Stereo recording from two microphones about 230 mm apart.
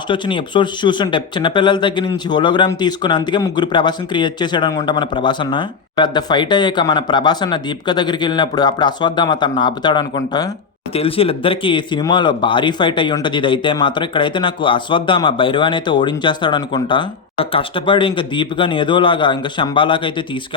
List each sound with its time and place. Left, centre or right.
0.1 s speech: left